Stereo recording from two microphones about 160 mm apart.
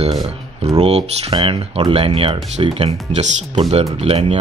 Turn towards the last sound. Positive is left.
turn(degrees=-40)  # may be behind; listen again after turning